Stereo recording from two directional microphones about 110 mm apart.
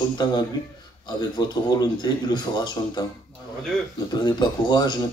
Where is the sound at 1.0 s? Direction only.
40° left (ahead or behind).